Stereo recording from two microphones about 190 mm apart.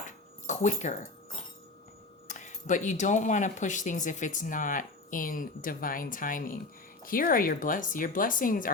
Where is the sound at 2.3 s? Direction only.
40° left (ahead or behind).